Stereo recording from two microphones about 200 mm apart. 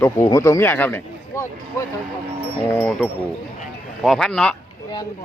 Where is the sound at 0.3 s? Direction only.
15° left (ahead or behind).